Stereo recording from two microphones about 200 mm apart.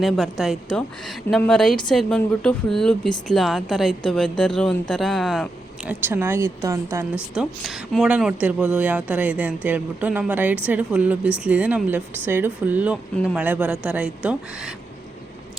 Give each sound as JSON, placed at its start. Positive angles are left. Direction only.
{"t": 0.0, "sound": "speech", "side_deg": 0}
{"t": 5.9, "sound": "a woman's voice", "side_deg": -10}
{"t": 7.3, "sound": "a woman's voice", "side_deg": 0}